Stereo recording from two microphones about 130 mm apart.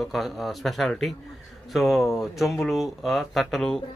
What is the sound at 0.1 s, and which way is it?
Speech, centre (ahead or behind).